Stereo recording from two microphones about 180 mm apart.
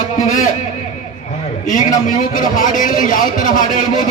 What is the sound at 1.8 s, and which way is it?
A man's voice, 45° left (ahead or behind).